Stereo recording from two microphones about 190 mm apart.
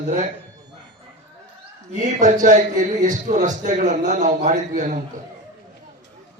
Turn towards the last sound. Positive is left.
turn(degrees=-40)  # may be behind; listen again after turning